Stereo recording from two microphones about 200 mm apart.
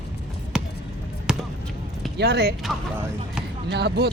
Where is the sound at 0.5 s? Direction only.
5° right (ahead or behind).